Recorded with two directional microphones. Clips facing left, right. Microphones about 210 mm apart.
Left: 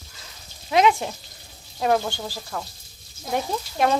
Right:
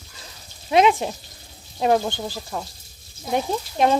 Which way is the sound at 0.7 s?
20° right (ahead or behind).